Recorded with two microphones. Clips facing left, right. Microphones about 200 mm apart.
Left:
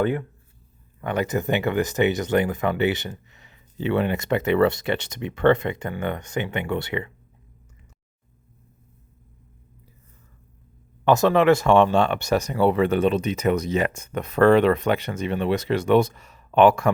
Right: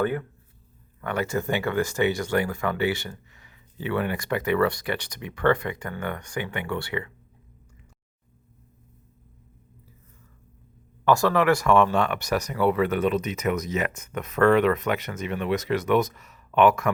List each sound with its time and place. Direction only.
1.0 s speech: 20° left (ahead or behind)
11.0 s speech: 20° left (ahead or behind)